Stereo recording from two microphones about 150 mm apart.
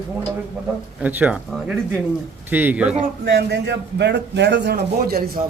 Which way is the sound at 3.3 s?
90° right.